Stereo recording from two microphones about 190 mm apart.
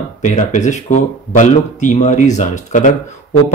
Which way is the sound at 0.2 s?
40° left (ahead or behind).